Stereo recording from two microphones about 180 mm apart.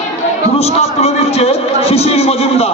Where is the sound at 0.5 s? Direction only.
35° left (ahead or behind).